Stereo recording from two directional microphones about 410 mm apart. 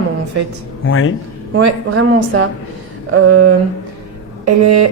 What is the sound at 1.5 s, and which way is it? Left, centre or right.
A woman's voice, right.